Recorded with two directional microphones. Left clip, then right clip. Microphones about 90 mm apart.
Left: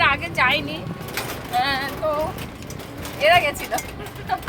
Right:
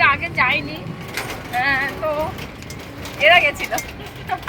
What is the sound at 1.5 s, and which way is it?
Speech, 15° left (ahead or behind).